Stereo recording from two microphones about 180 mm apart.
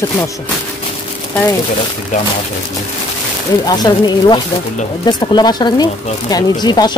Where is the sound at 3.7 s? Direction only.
20° left (ahead or behind).